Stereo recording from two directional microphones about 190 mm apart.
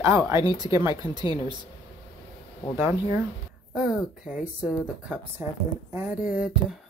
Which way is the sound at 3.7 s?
Centre (ahead or behind).